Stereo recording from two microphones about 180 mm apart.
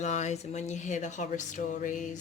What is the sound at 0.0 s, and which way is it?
Speech, 40° left (ahead or behind).